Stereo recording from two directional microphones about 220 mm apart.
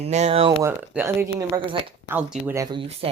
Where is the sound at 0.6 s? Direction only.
10° right (ahead or behind).